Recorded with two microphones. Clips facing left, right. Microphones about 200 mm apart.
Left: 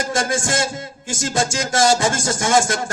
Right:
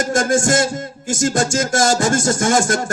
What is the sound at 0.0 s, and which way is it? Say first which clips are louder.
A man's voice: right 5 dB; 45° right (ahead or behind).